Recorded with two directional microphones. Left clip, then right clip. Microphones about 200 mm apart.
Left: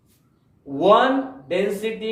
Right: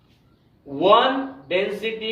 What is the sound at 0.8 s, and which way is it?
A woman's voice, 20° left (ahead or behind).